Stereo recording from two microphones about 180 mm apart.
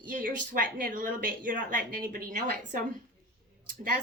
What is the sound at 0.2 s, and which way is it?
A woman's voice, 50° right (ahead or behind).